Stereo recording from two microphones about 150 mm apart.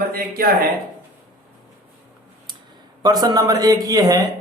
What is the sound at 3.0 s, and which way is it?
A man's voice, 25° right (ahead or behind).